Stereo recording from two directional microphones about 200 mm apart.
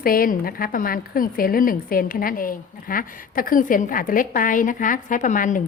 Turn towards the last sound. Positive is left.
turn(degrees=40)  # may be behind; listen again after turning